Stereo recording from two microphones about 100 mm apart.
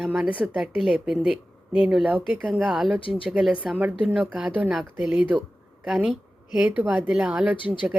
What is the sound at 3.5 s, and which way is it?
A woman's voice, 15° right (ahead or behind).